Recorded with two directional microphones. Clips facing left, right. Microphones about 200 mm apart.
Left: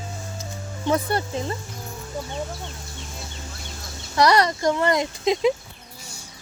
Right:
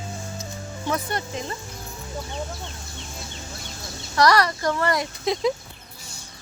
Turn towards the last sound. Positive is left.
turn(degrees=15)  # may be behind; listen again after turning